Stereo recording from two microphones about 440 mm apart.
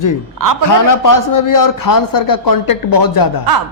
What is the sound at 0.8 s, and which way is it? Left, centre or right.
A man's voice, left.